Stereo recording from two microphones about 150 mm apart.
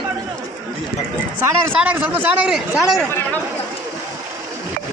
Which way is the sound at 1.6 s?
10° right (ahead or behind).